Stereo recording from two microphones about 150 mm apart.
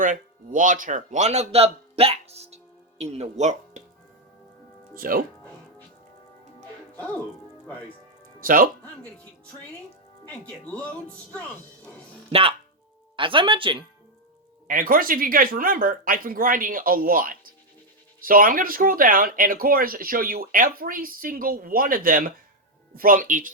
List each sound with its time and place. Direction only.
0.0 s a man's voice: 60° right (ahead or behind)
4.9 s speech: 70° right (ahead or behind)
8.4 s speech: 70° right (ahead or behind)
12.3 s speech: 40° right (ahead or behind)
14.7 s speech: 70° right (ahead or behind)